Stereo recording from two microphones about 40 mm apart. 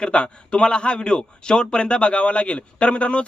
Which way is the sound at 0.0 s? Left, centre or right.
Left.